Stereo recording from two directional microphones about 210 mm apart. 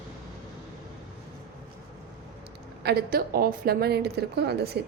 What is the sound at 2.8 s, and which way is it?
A woman's voice, 45° right (ahead or behind).